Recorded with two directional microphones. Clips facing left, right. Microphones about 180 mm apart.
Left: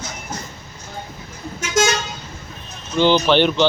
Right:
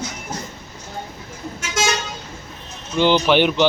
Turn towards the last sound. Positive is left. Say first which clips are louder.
# even
turn(degrees=-10)  # may be behind; listen again after turning